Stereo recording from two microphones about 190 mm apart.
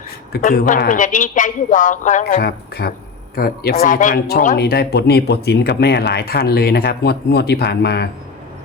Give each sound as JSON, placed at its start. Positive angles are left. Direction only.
{"t": 0.3, "sound": "a man's voice", "side_deg": 50}